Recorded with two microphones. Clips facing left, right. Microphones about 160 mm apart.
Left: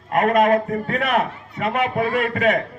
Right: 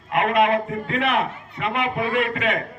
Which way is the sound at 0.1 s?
45° left (ahead or behind).